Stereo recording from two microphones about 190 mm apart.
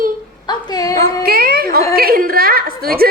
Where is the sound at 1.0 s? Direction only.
55° right (ahead or behind).